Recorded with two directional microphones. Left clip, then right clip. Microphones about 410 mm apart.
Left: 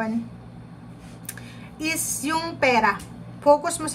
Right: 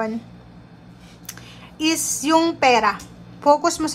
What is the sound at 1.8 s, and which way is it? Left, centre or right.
Speech, centre.